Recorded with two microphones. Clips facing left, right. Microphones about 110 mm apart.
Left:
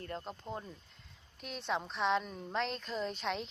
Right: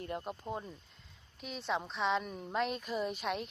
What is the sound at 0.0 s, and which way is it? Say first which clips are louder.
A woman's voice: right 3 dB; 15° right (ahead or behind).